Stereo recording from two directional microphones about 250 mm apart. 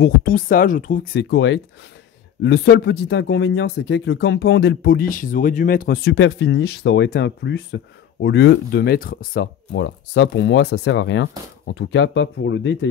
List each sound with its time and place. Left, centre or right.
0.0 s speech: left
1.3 s speech: left